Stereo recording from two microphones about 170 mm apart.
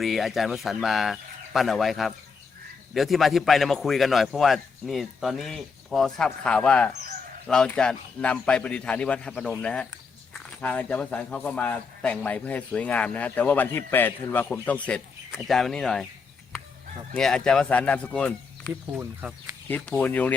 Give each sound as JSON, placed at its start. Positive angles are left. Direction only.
{"t": 0.0, "sound": "a man's voice", "side_deg": 0}
{"t": 14.8, "sound": "a sound", "side_deg": 5}
{"t": 15.4, "sound": "a man's voice", "side_deg": 0}
{"t": 17.2, "sound": "a man's voice", "side_deg": 5}
{"t": 18.9, "sound": "speech", "side_deg": -10}
{"t": 19.6, "sound": "speech", "side_deg": 10}